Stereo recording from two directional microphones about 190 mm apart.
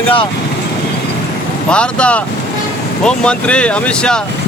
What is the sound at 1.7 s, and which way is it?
Speech, 5° left (ahead or behind).